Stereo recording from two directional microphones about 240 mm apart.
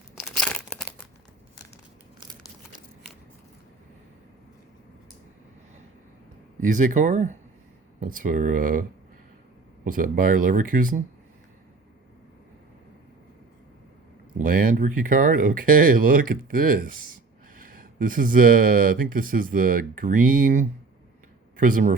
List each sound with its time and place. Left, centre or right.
0.3 s crumpling: centre
6.6 s speech: right
9.8 s speech: right
14.4 s speech: right